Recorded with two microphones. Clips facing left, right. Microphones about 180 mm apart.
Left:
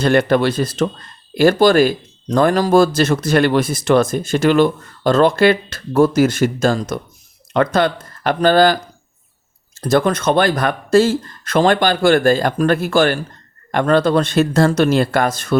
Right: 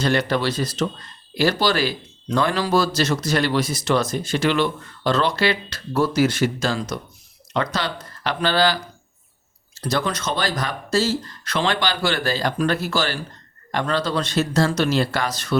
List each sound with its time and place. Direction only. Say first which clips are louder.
0.0 s speech: left 7 dB; 55° left (ahead or behind)